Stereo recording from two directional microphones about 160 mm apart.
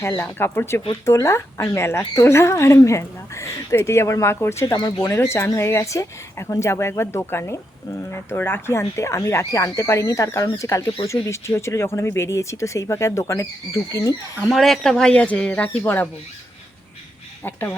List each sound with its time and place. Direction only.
0.0 s speech: 15° left (ahead or behind)
14.5 s speech: centre (ahead or behind)
17.4 s speech: 10° left (ahead or behind)